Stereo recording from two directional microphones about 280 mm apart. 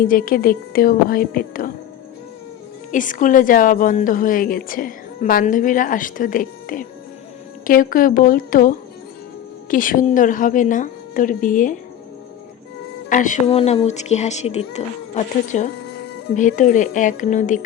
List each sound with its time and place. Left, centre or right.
0.0 s a woman's voice: left
2.9 s a woman's voice: left
13.1 s a woman's voice: left